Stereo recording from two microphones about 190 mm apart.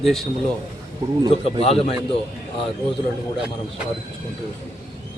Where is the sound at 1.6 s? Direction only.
30° left (ahead or behind).